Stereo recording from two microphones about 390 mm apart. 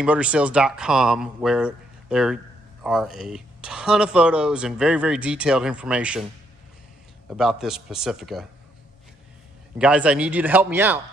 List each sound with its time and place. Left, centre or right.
0.0 s speech: centre
7.2 s speech: centre
9.8 s speech: centre